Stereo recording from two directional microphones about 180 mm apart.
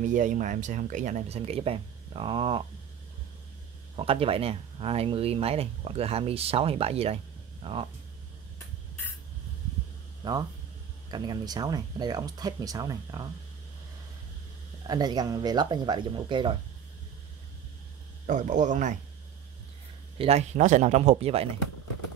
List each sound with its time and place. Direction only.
0.0 s speech: 45° right (ahead or behind); by 2.6 s 30° right (ahead or behind)
3.9 s speech: 30° right (ahead or behind)
10.2 s speech: 20° right (ahead or behind)
14.9 s speech: 20° right (ahead or behind)
18.2 s speech: 45° right (ahead or behind)
20.2 s speech: 35° right (ahead or behind)